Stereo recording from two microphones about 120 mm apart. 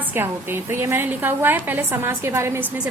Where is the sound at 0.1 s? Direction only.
20° right (ahead or behind).